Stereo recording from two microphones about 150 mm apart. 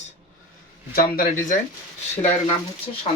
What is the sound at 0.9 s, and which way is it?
Speech, 75° left (ahead or behind).